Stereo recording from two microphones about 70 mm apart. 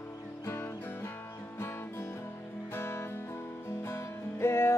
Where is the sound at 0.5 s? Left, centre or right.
Left.